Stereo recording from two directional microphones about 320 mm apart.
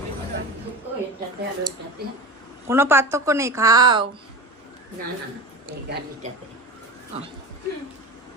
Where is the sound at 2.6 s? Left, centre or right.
Centre.